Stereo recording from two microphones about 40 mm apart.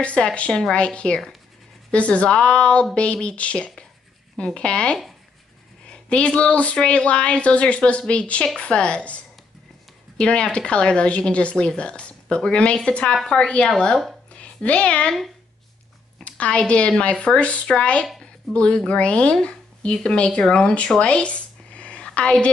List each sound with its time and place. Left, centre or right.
0.0 s speech: left
0.5 s speech: centre
0.7 s speech: left
10.1 s speech: left
14.3 s a sound: left
16.3 s a woman's voice: left
18.2 s a sound: left
18.9 s speech: left
21.0 s a sound: left